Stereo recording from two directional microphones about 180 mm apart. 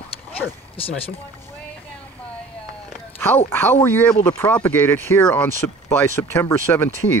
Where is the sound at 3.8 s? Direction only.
10° left (ahead or behind).